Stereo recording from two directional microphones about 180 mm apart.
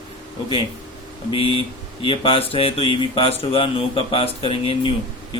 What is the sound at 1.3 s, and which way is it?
Speech, 30° left (ahead or behind).